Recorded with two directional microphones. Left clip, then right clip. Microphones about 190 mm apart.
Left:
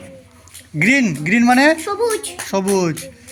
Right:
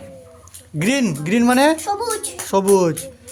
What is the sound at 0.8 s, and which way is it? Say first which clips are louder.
Speech: left 5 dB; 35° right (ahead or behind).